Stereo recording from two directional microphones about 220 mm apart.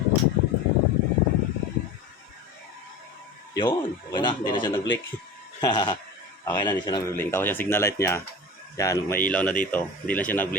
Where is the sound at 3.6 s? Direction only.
15° left (ahead or behind).